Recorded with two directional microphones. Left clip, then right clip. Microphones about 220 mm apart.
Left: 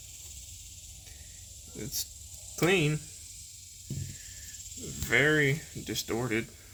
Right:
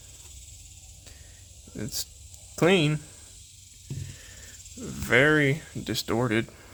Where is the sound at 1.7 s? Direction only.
50° right (ahead or behind).